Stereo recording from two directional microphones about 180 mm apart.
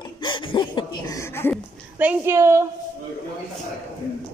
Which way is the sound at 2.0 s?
10° right (ahead or behind).